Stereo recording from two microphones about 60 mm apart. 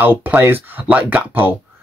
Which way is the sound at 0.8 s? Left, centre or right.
Right.